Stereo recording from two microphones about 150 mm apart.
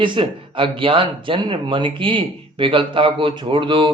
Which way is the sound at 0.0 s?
35° right (ahead or behind).